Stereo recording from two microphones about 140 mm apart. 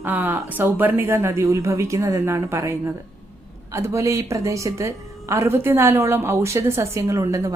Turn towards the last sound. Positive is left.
turn(degrees=-20)  # may be behind; listen again after turning